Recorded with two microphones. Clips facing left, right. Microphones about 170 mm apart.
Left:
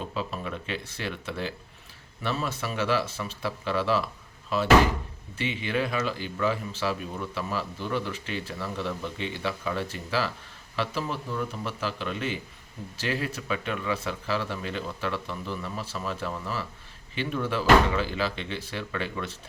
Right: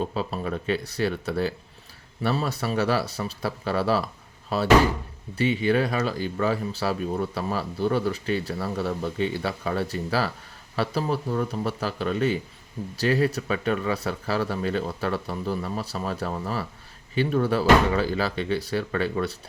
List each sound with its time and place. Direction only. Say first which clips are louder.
0.0 s speech: right 5 dB; 40° right (ahead or behind)